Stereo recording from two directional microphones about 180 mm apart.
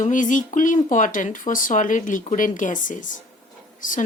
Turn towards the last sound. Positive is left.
turn(degrees=45)  # may be behind; listen again after turning